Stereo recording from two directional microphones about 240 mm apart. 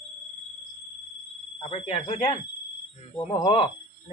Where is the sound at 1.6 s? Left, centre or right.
Left.